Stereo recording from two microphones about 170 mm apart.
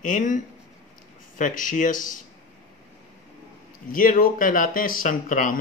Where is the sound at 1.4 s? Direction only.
50° left (ahead or behind).